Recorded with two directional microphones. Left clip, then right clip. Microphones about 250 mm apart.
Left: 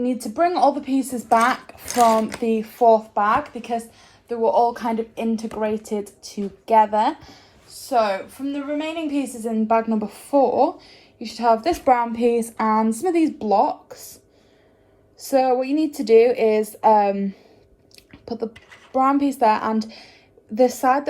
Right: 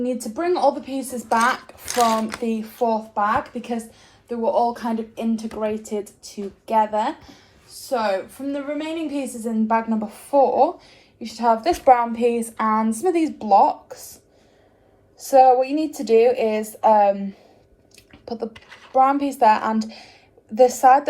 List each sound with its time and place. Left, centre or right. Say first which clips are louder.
0.0 s a woman's voice: left 4 dB; left
15.3 s a woman's voice: right 5 dB; left
17.9 s a sound: even; left
18.9 s a woman's voice: right 2 dB; left